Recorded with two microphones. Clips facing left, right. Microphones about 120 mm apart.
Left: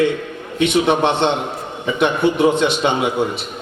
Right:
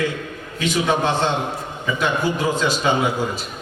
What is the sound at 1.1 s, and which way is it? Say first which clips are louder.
Speech: left 3 dB; 70° left (ahead or behind).